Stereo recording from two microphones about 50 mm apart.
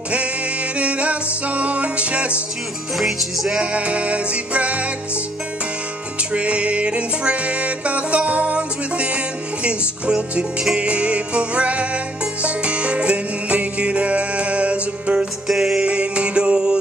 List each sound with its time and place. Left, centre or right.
0.7 s music: right
3.0 s music: centre
3.7 s music: right
6.3 s music: right
15.4 s music: centre
15.8 s music: right